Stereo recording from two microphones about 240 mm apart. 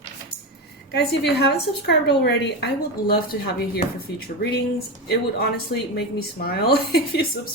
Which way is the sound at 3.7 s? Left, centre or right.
Left.